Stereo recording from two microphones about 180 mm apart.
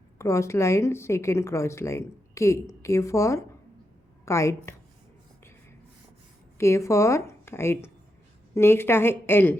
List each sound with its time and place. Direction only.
0.2 s a woman's voice: 15° left (ahead or behind)
6.6 s a woman's voice: 15° left (ahead or behind)